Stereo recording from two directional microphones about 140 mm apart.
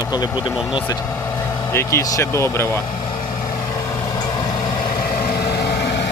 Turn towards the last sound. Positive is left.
turn(degrees=90)